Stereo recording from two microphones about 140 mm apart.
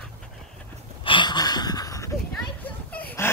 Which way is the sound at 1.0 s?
35° left (ahead or behind).